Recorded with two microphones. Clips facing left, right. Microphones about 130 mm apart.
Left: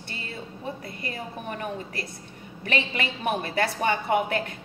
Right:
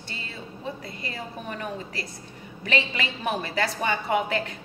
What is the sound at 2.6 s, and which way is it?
A woman's voice, 55° left (ahead or behind).